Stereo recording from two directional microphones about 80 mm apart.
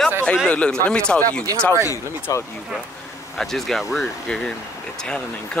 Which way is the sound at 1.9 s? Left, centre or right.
Left.